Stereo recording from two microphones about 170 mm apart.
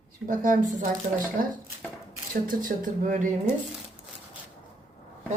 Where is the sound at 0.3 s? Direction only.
50° right (ahead or behind).